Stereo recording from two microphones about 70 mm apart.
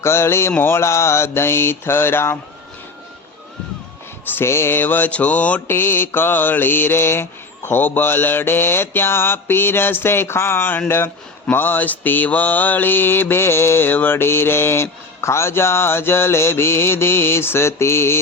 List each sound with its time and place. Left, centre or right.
0.0 s mantra: left
4.3 s speech: left; by 5.6 s centre
5.6 s mantra: left